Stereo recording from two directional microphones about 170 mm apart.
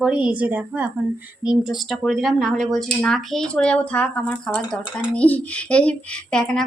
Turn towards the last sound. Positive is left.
turn(degrees=5)  # may be behind; listen again after turning